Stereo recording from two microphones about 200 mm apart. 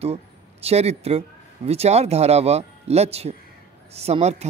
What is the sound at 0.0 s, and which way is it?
A man's voice, 30° right (ahead or behind).